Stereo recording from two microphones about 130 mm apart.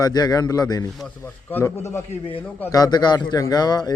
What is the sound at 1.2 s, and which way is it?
A man's voice, 20° left (ahead or behind).